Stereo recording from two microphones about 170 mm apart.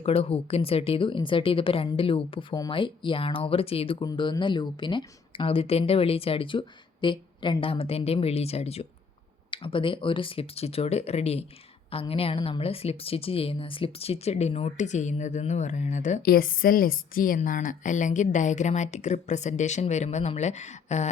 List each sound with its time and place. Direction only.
0.0 s speech: 35° left (ahead or behind)
16.2 s a woman's voice: 60° left (ahead or behind); by 21.1 s 40° left (ahead or behind)